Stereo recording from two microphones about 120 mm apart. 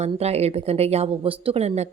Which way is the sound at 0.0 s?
60° right (ahead or behind).